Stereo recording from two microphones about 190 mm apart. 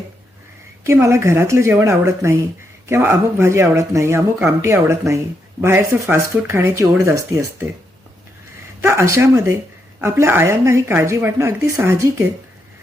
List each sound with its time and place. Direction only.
0.9 s speech: 15° right (ahead or behind)
8.8 s speech: 15° right (ahead or behind)